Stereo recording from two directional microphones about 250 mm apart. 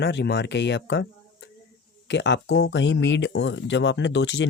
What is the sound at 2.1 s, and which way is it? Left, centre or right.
Speech, left.